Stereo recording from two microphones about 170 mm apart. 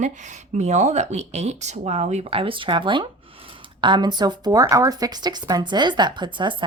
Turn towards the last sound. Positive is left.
turn(degrees=-25)  # may be behind; listen again after turning